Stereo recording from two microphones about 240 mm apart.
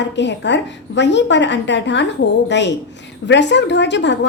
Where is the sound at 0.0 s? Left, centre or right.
Left.